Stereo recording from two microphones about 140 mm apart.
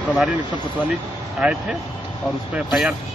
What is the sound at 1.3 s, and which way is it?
Speech, centre (ahead or behind).